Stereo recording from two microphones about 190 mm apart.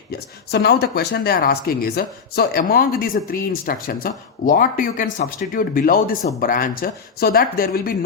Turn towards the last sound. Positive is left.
turn(degrees=50)  # may be behind; listen again after turning